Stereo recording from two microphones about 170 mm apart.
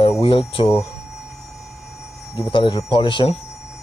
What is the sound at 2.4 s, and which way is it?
Speech, 30° left (ahead or behind).